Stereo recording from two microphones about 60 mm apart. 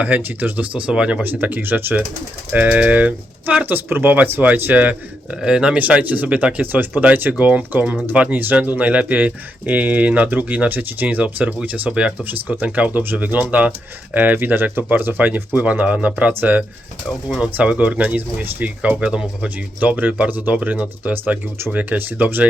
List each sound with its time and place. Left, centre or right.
0.0 s speech: right
1.2 s speech: right
5.4 s speech: centre
5.8 s speech: right
17.3 s speech: right